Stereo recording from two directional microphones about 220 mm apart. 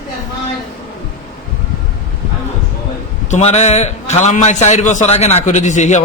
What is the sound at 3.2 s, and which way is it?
A man's voice, 30° left (ahead or behind).